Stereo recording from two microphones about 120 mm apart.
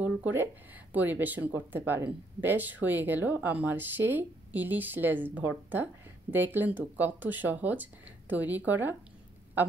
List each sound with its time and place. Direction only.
0.0 s speech: 15° right (ahead or behind)